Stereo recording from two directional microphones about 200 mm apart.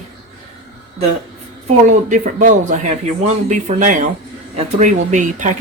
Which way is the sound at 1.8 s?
40° right (ahead or behind).